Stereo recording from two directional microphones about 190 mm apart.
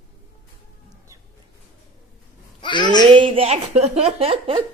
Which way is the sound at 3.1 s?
25° right (ahead or behind).